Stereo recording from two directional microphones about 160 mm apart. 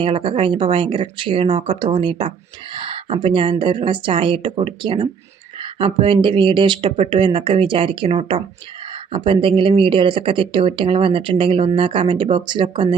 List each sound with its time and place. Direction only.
0.0 s speech: 30° right (ahead or behind)